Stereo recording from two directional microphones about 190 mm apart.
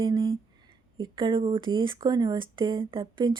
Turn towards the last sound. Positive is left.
turn(degrees=-25)  # may be behind; listen again after turning